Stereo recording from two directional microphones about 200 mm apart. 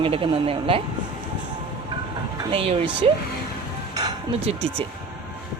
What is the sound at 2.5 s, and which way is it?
Speech, 30° right (ahead or behind).